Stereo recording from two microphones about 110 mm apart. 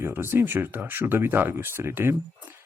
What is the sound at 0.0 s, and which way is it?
A man's voice, 20° right (ahead or behind).